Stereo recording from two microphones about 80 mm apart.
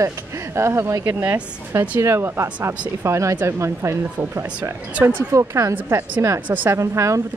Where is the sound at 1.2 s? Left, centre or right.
Right.